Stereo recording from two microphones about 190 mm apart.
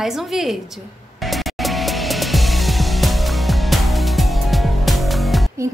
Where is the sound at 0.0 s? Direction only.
Centre (ahead or behind).